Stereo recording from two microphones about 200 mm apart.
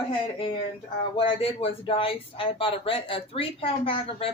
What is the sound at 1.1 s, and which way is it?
Speech, 30° left (ahead or behind).